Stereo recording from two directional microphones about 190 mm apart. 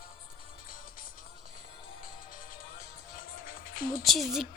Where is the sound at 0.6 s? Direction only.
50° left (ahead or behind).